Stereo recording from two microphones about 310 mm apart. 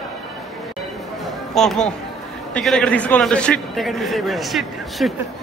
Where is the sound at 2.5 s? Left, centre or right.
Centre.